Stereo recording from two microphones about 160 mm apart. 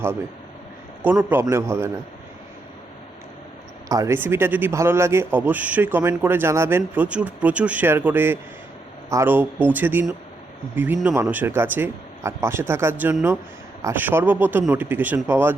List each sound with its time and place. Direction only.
1.0 s speech: 10° right (ahead or behind)
3.8 s speech: 20° right (ahead or behind)